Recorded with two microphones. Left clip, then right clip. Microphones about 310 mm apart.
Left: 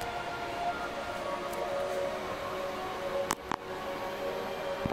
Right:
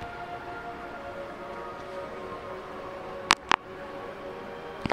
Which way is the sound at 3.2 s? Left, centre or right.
Right.